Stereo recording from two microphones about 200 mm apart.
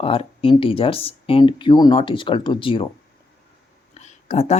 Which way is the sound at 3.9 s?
35° left (ahead or behind).